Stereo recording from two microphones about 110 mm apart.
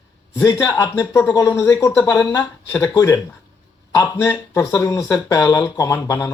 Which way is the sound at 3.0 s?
30° left (ahead or behind).